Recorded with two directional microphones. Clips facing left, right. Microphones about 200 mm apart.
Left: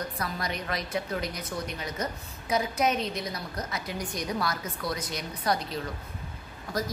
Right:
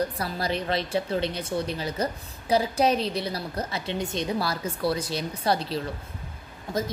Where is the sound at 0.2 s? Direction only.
30° right (ahead or behind).